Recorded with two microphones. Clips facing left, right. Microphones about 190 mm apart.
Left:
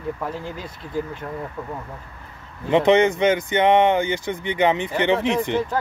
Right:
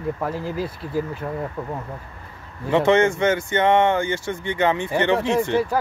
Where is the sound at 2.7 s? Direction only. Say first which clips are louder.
Left 1 dB; 15° left (ahead or behind).